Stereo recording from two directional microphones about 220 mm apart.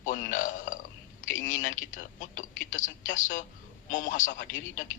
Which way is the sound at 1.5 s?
35° left (ahead or behind).